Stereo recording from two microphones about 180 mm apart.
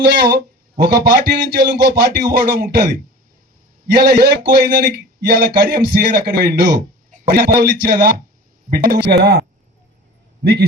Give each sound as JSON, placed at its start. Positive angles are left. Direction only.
{"t": 0.3, "sound": "speech", "side_deg": -65}
{"t": 3.9, "sound": "speech", "side_deg": -65}
{"t": 10.4, "sound": "speech", "side_deg": -65}